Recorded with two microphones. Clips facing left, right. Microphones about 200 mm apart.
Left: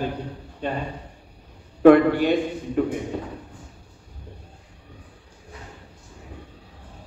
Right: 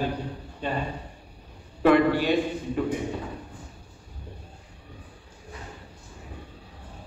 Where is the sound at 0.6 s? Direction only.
55° left (ahead or behind).